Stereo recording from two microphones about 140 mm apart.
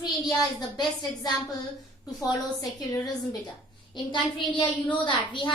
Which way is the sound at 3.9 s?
35° left (ahead or behind).